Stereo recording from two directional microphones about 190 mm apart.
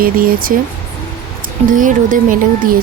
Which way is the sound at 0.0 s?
50° right (ahead or behind).